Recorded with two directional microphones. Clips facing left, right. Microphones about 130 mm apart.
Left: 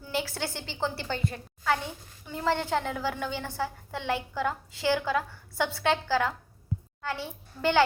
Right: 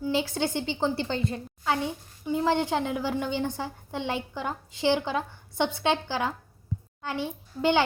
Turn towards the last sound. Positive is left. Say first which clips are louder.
# right 2 dB
turn(degrees=-20)  # may be behind; listen again after turning